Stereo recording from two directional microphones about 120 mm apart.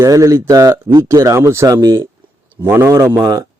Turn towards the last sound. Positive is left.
turn(degrees=-30)  # may be behind; listen again after turning